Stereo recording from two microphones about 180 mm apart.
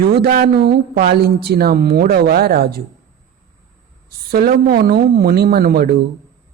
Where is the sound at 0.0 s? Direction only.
55° right (ahead or behind).